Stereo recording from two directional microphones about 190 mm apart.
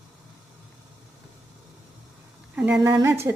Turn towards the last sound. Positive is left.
turn(degrees=-15)  # may be behind; listen again after turning